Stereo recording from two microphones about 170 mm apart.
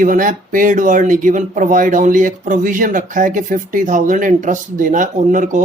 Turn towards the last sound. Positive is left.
turn(degrees=-50)  # may be behind; listen again after turning